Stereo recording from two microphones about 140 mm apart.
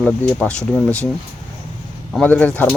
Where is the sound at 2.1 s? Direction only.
10° left (ahead or behind).